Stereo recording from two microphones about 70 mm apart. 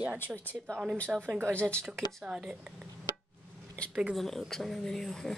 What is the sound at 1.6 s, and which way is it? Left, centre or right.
Speech, centre.